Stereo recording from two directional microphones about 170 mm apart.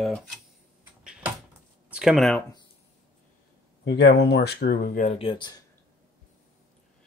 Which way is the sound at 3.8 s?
80° left.